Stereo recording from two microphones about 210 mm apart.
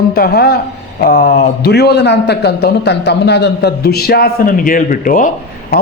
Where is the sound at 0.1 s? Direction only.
45° left (ahead or behind).